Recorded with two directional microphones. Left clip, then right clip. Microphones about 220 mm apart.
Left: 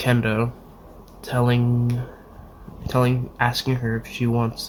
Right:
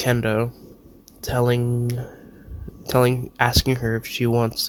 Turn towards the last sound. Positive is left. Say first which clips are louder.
# right 4 dB
turn(degrees=-45)  # may be behind; listen again after turning